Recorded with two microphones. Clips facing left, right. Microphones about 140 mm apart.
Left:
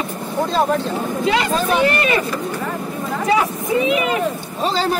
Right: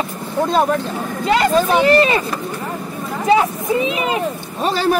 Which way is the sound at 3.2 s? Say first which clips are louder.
Right 4 dB; 30° right (ahead or behind).